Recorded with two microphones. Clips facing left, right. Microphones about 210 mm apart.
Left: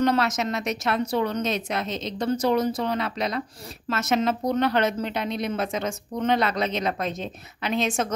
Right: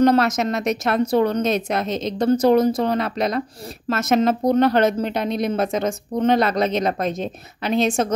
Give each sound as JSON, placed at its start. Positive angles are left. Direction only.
{"t": 0.0, "sound": "a woman's voice", "side_deg": -45}